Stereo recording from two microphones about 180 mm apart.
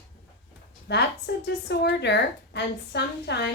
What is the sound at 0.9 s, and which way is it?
A woman's voice, 70° left (ahead or behind).